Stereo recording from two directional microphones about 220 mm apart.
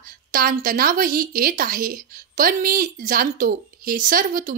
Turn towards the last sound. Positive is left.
turn(degrees=-40)  # may be behind; listen again after turning